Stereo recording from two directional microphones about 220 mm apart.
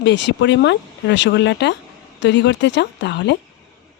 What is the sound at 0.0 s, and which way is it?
Speech, 55° left (ahead or behind).